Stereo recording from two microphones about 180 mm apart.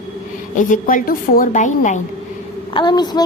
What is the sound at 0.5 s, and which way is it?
A woman's voice, 45° left (ahead or behind).